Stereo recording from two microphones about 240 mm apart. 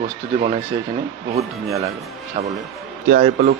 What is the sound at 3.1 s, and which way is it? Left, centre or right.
Speech, right.